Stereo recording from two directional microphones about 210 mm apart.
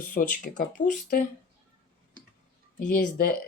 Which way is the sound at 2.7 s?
45° left (ahead or behind).